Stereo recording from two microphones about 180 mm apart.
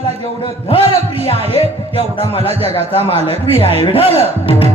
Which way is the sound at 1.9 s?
30° left (ahead or behind).